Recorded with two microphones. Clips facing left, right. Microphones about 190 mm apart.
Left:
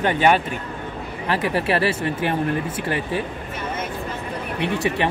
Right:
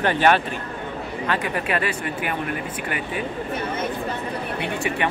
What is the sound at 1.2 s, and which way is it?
Speech, 30° left (ahead or behind).